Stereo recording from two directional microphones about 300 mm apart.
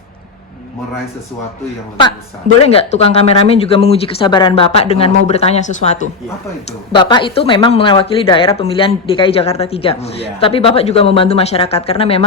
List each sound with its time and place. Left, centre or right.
2.6 s speech: centre